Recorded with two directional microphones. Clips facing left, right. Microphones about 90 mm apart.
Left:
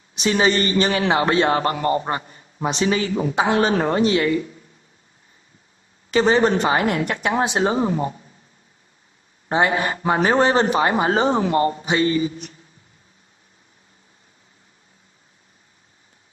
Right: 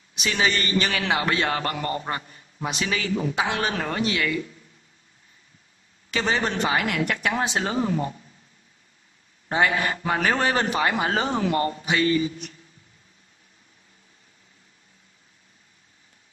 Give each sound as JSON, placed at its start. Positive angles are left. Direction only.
{"t": 0.1, "sound": "a man's voice", "side_deg": 30}
{"t": 6.0, "sound": "a man's voice", "side_deg": 35}
{"t": 9.5, "sound": "a man's voice", "side_deg": 25}